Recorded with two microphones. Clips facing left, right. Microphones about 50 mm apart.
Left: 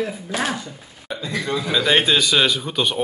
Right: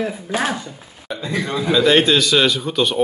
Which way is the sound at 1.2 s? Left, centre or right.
Right.